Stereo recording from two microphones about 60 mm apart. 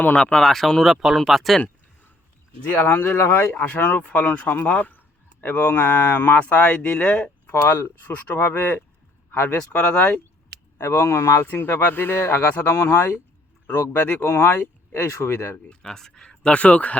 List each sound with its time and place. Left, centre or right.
0.2 s speech: centre
0.4 s speech: centre
2.6 s speech: left
7.6 s speech: left
10.8 s speech: left
11.4 s speech: left
15.7 s speech: centre